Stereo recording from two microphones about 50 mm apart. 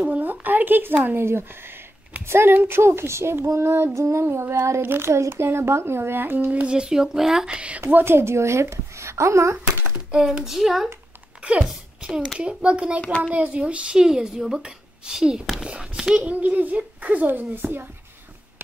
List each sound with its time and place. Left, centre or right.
0.0 s a sound: right
1.2 s speech: right
2.5 s a child's voice: right
2.8 s speech: right
3.4 s speech: right
4.8 s speech: right
6.5 s a child's voice: right
6.8 s speech: centre
7.5 s a child's voice: right
7.9 s speech: right
10.4 s speech: centre
11.4 s a child's voice: right